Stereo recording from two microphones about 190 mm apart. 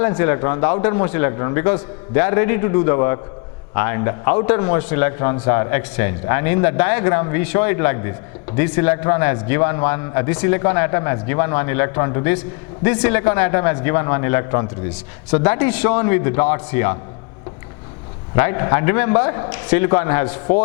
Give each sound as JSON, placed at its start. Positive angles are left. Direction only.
{"t": 0.2, "sound": "a man's voice", "side_deg": 15}
{"t": 18.3, "sound": "a man's voice", "side_deg": 15}